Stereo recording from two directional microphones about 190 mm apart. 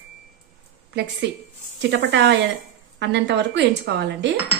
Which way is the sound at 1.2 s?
70° right (ahead or behind).